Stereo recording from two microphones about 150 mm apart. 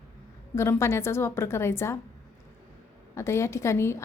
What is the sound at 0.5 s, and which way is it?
A woman's voice, 15° left (ahead or behind).